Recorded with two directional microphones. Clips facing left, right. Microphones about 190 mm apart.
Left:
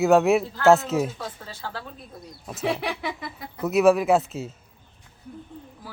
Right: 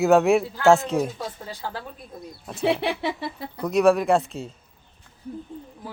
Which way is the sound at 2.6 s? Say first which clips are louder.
Right 4 dB; 25° right (ahead or behind).